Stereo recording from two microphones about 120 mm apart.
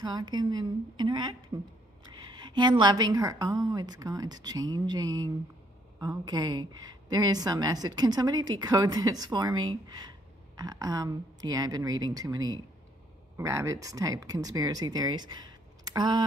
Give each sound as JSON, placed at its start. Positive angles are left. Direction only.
{"t": 0.0, "sound": "speech", "side_deg": -40}
{"t": 2.1, "sound": "a sound", "side_deg": -40}
{"t": 2.8, "sound": "speech", "side_deg": -35}